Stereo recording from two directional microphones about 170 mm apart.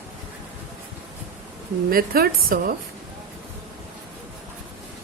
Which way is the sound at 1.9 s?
60° right (ahead or behind).